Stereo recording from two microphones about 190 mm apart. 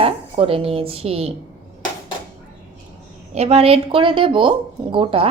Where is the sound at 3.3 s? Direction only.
35° right (ahead or behind).